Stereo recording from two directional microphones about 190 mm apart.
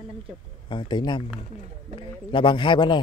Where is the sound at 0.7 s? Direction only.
25° left (ahead or behind).